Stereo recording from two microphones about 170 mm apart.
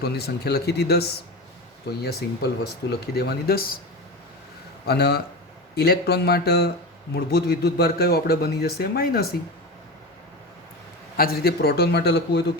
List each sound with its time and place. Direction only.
0.0 s a man's voice: 70° left (ahead or behind)
4.9 s a man's voice: 70° left (ahead or behind)
11.2 s a man's voice: 65° left (ahead or behind)